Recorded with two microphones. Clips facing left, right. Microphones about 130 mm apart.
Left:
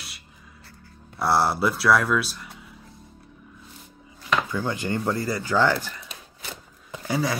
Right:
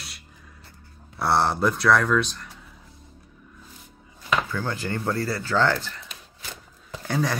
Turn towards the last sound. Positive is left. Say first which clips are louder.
# even
turn(degrees=5)  # may be behind; listen again after turning